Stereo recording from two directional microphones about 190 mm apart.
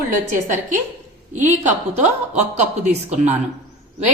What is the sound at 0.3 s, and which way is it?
Speech, 40° right (ahead or behind).